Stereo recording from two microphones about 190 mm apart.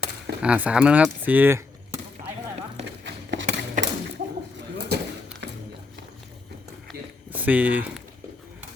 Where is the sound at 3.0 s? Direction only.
65° right (ahead or behind).